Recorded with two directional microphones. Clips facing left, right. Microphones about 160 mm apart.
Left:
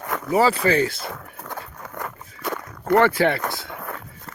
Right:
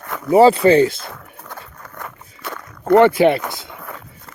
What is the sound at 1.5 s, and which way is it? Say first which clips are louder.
Patter: left 3 dB; 15° left (ahead or behind).